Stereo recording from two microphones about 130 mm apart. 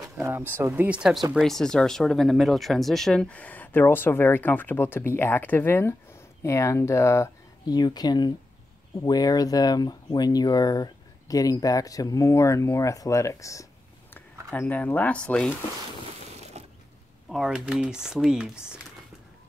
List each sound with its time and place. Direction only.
0.2 s speech: 15° right (ahead or behind); by 13.7 s 25° left (ahead or behind)
14.5 s speech: 15° left (ahead or behind)
16.6 s a sound: 55° right (ahead or behind)
17.3 s speech: 5° right (ahead or behind)